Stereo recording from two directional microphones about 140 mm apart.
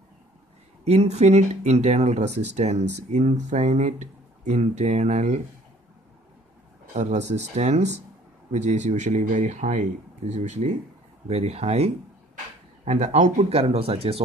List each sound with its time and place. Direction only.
0.8 s speech: 50° right (ahead or behind)
6.9 s speech: 60° right (ahead or behind); by 14.2 s 45° right (ahead or behind)